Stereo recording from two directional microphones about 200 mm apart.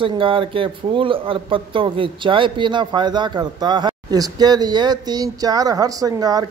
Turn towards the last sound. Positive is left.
turn(degrees=-20)  # may be behind; listen again after turning